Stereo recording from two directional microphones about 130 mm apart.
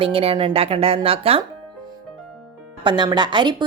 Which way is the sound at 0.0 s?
45° right (ahead or behind).